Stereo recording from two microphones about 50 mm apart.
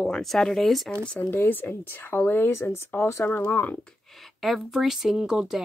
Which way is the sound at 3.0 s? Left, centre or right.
Left.